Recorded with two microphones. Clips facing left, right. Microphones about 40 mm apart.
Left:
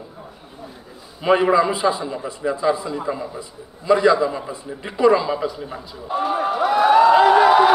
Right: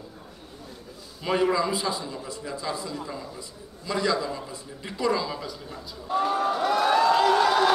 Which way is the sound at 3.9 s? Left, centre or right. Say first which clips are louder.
Left 10 dB; left.